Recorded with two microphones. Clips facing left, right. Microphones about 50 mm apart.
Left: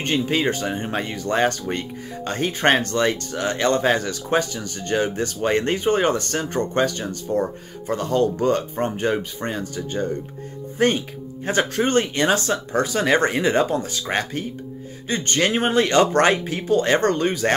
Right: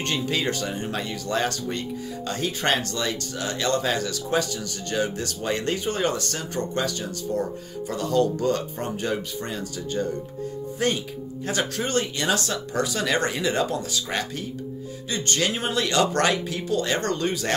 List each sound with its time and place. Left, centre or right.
0.0 s speech: left